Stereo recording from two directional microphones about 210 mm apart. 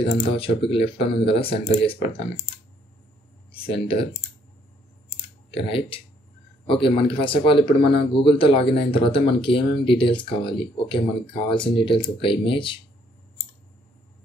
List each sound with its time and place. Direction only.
0.1 s speech: 25° left (ahead or behind)
3.5 s speech: 25° left (ahead or behind)
5.5 s speech: 25° left (ahead or behind)